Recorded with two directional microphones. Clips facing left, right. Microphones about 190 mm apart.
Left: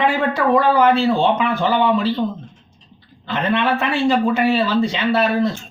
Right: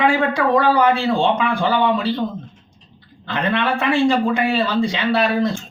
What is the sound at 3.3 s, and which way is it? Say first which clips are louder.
Speech: left 1 dB; 5° left (ahead or behind).